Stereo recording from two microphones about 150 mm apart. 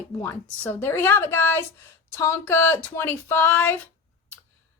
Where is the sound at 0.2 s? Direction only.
10° left (ahead or behind).